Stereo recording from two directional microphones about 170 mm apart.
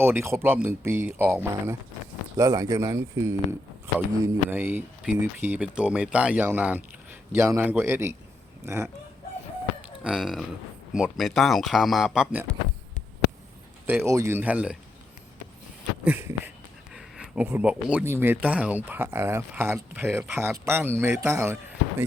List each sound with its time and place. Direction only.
0.0 s speech: 15° right (ahead or behind)
10.0 s speech: 5° right (ahead or behind)
13.8 s speech: 15° right (ahead or behind)
16.0 s speech: 10° right (ahead or behind)